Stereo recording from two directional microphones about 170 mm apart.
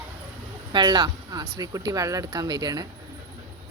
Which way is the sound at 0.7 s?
25° right (ahead or behind).